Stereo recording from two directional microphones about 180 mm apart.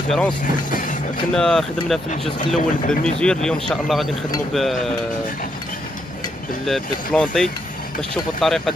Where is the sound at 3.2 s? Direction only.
5° left (ahead or behind).